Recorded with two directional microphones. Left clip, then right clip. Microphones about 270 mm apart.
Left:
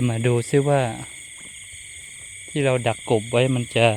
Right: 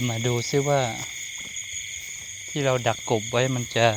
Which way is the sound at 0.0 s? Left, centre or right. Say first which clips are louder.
Left 4 dB; left.